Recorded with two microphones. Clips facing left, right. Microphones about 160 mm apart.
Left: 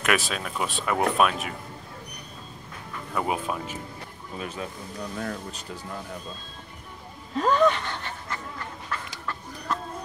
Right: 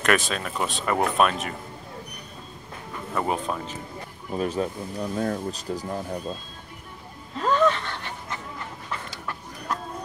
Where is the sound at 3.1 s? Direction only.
5° left (ahead or behind).